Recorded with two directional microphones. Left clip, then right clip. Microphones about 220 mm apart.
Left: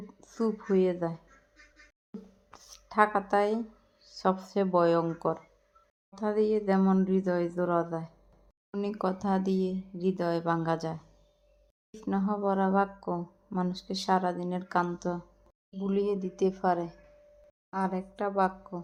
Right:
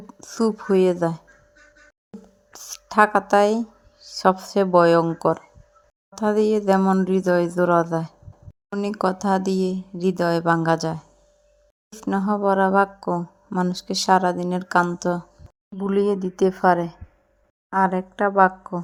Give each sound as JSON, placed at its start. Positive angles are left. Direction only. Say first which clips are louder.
{"t": 0.1, "sound": "speech", "louder": "right 9 dB", "side_deg": -25}
{"t": 2.5, "sound": "speech", "louder": "right 13 dB", "side_deg": -25}